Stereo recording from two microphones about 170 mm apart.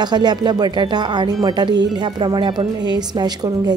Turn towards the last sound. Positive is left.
turn(degrees=-25)  # may be behind; listen again after turning